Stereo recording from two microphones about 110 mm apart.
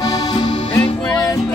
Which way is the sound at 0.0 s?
40° left (ahead or behind).